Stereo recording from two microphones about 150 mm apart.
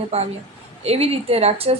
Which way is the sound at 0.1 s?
40° right (ahead or behind).